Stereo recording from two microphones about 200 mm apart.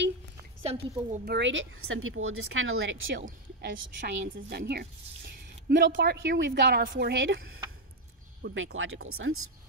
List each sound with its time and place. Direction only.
0.6 s a woman's voice: 30° right (ahead or behind)
1.2 s speech: 60° right (ahead or behind); by 3.0 s 80° right
3.1 s speech: 45° right (ahead or behind)
4.2 s speech: 55° right (ahead or behind)
8.7 s speech: 85° right